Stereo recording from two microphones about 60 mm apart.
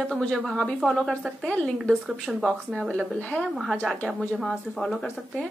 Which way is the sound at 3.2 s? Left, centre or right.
Left.